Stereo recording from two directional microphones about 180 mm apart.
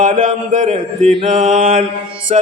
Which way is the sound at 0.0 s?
45° right (ahead or behind).